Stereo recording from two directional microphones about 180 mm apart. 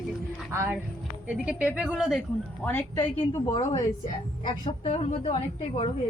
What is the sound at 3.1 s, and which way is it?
A woman's voice, 25° left (ahead or behind).